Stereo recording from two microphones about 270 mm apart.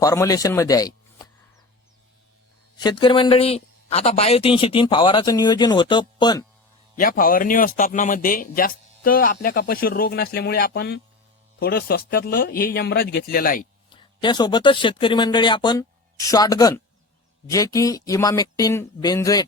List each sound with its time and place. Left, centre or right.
0.0 s a man's voice: centre
2.7 s a man's voice: centre
7.0 s speech: left
13.9 s a man's voice: centre